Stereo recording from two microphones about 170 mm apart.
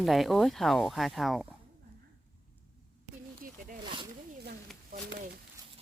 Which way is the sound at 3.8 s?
30° right (ahead or behind).